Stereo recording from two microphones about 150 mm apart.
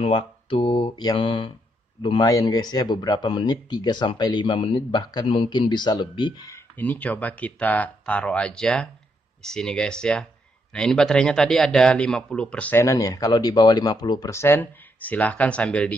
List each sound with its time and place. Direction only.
0.0 s speech: 35° left (ahead or behind)
6.8 s speech: 10° left (ahead or behind)
12.8 s speech: 20° left (ahead or behind)